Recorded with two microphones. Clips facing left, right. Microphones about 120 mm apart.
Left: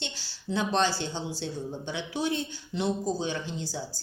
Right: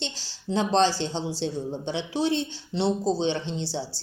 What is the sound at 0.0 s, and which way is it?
A woman's voice, 30° right (ahead or behind).